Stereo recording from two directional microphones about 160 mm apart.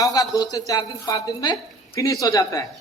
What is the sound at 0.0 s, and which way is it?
A man's voice, 25° left (ahead or behind).